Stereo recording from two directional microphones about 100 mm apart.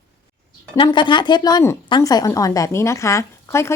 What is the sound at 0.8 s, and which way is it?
A woman's voice, 55° left (ahead or behind).